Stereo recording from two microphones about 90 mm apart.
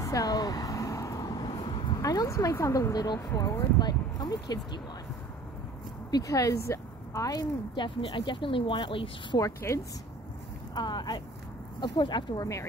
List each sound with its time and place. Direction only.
0.0 s a sound: 40° left (ahead or behind)
1.5 s a sound: 65° left (ahead or behind)
2.0 s speech: 40° left (ahead or behind)
3.2 s speech: 35° left (ahead or behind)
3.8 s speech: 50° left (ahead or behind)
6.0 s speech: 40° left (ahead or behind)
7.7 s speech: 60° left (ahead or behind)
9.6 s speech: 30° left (ahead or behind)
10.7 s speech: 55° left (ahead or behind)